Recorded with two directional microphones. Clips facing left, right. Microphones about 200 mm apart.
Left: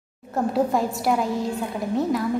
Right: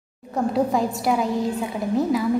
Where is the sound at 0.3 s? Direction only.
Centre (ahead or behind).